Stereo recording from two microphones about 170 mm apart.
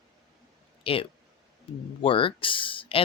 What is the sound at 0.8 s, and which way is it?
Speech, 35° left (ahead or behind).